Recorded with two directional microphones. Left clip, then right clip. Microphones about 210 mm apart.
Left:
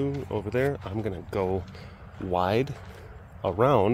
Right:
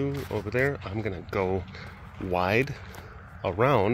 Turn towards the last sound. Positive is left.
turn(degrees=15)  # may be behind; listen again after turning